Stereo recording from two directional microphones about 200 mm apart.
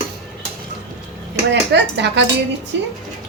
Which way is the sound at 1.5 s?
60° right (ahead or behind).